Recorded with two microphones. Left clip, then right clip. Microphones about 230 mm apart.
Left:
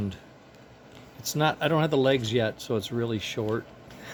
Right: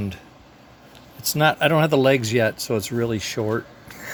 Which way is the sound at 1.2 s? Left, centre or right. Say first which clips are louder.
Right 7 dB; right.